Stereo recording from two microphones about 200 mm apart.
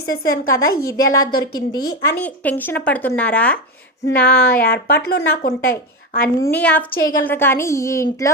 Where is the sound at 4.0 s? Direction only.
50° left (ahead or behind).